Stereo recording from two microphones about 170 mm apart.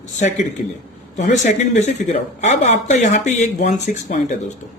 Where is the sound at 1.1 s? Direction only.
45° left (ahead or behind).